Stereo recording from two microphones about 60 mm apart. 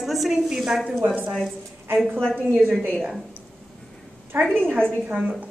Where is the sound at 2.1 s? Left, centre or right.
Centre.